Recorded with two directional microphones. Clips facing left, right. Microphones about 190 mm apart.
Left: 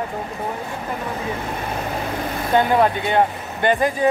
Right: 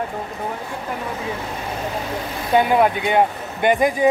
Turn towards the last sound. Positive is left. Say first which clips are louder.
# right 2 dB
turn(degrees=-15)  # may be behind; listen again after turning